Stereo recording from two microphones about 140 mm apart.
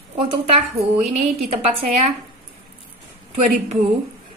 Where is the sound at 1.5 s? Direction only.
50° right (ahead or behind).